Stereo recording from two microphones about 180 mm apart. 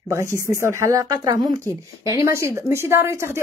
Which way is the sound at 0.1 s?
15° right (ahead or behind).